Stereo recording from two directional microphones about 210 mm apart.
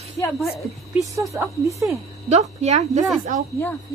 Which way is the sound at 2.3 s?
30° right (ahead or behind).